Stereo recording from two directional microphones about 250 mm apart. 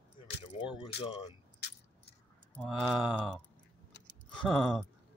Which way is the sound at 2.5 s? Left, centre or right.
Centre.